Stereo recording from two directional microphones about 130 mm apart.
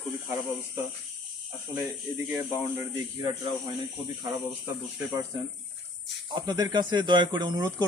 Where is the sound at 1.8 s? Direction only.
15° right (ahead or behind).